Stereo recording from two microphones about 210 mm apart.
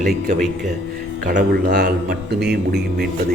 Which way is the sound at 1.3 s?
50° right (ahead or behind).